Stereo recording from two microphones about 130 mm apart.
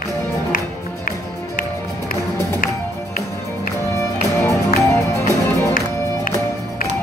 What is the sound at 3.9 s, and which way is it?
Music, 20° left (ahead or behind).